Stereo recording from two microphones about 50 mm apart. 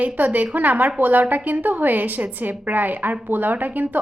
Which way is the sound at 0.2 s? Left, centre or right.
Right.